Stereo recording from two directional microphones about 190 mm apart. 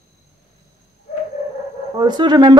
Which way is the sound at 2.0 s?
25° right (ahead or behind).